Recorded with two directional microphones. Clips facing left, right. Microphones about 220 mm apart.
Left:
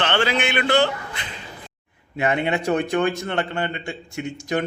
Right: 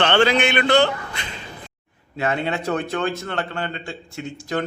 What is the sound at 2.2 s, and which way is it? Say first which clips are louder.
A man's voice: left 2 dB; 15° left (ahead or behind).